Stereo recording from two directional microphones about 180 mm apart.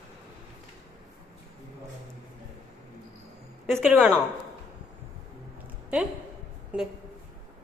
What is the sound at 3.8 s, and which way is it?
Speech, centre (ahead or behind).